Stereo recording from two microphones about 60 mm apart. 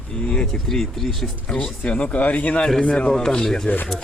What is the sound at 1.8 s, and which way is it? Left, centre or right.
Speech, centre.